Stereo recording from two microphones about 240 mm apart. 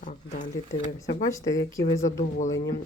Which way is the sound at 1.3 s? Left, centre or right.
Centre.